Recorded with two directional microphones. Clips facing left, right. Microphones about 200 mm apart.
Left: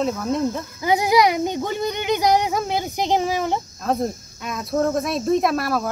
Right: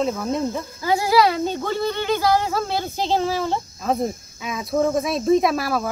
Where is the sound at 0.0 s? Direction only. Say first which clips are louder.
Left 1 dB; centre (ahead or behind).